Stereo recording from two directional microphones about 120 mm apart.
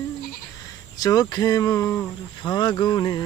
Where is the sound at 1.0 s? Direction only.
30° left (ahead or behind).